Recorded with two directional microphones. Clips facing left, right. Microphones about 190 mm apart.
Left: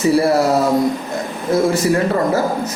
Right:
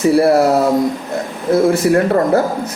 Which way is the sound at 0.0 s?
60° right (ahead or behind).